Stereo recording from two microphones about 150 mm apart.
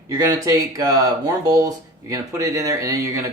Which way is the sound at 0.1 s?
25° right (ahead or behind).